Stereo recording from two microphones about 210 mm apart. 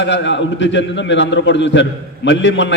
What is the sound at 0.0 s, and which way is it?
A man's voice, 60° left (ahead or behind).